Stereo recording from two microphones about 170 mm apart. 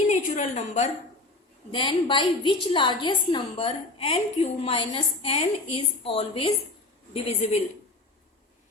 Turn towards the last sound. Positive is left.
turn(degrees=40)  # may be behind; listen again after turning